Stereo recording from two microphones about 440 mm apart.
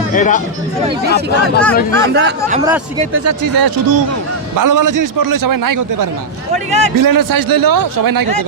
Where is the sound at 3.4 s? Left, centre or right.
Right.